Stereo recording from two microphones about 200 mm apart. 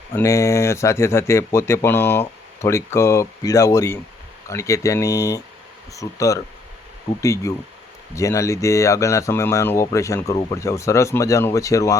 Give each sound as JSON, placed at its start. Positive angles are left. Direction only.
{"t": 0.1, "sound": "speech", "side_deg": 15}